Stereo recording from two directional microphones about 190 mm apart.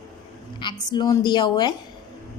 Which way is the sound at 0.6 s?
25° left (ahead or behind).